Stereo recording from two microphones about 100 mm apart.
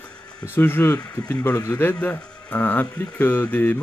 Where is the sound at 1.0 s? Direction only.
35° left (ahead or behind).